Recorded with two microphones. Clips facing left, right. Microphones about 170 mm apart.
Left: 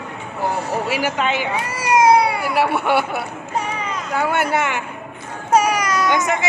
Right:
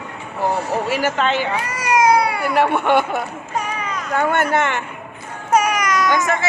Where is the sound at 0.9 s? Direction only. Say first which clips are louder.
Right 2 dB; 10° left (ahead or behind).